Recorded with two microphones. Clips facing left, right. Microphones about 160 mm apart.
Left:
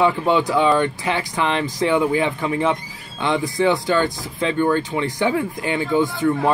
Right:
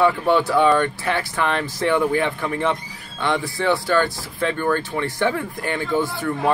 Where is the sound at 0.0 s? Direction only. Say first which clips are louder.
Even; 15° left (ahead or behind).